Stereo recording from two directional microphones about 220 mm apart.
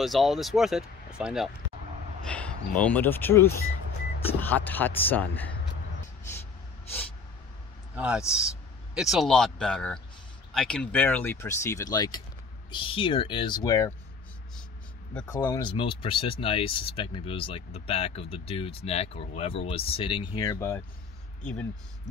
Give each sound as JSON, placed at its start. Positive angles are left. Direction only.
{"t": 0.0, "sound": "speech", "side_deg": 0}
{"t": 7.9, "sound": "speech", "side_deg": -5}
{"t": 15.1, "sound": "speech", "side_deg": 10}